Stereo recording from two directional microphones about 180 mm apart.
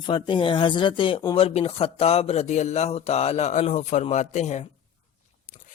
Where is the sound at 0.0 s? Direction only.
25° left (ahead or behind).